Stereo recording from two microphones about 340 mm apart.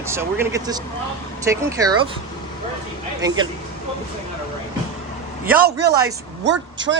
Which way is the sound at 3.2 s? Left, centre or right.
Centre.